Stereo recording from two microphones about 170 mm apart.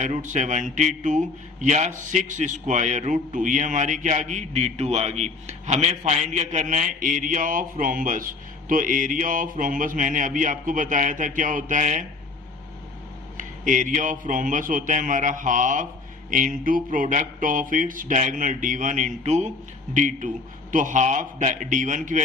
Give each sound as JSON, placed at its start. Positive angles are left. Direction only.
{"t": 0.0, "sound": "a man's voice", "side_deg": -45}
{"t": 13.3, "sound": "a man's voice", "side_deg": -50}